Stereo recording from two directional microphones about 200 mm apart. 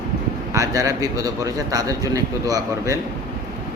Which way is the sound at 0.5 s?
15° right (ahead or behind).